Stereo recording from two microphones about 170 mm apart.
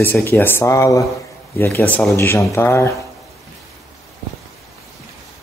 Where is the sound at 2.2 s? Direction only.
15° left (ahead or behind).